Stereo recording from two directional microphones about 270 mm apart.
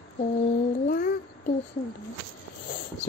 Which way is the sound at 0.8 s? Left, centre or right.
Left.